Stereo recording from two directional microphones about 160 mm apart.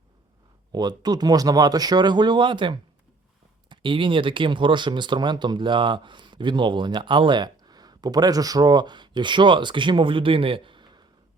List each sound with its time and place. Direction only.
0.7 s speech: 25° right (ahead or behind)